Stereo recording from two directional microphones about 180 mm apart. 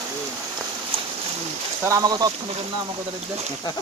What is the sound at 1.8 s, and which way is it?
Speech, 20° right (ahead or behind).